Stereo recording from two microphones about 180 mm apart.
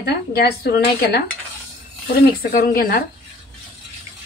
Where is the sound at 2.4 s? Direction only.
50° left (ahead or behind).